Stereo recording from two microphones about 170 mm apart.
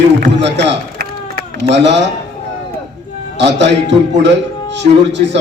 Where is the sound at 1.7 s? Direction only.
90° right.